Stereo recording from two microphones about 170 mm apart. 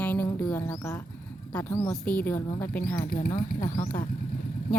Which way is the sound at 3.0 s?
55° left (ahead or behind).